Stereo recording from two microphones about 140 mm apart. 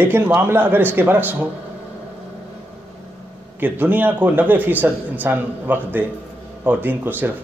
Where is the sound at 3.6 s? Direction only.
15° right (ahead or behind).